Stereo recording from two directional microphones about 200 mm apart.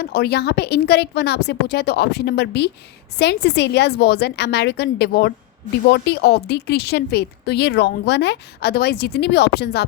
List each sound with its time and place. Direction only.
0.0 s a woman's voice: 50° left (ahead or behind)